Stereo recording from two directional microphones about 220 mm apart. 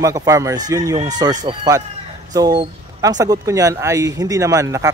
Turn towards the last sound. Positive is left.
turn(degrees=-15)  # may be behind; listen again after turning